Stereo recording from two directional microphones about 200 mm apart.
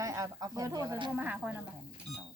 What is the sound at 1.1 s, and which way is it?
Speech, 5° right (ahead or behind).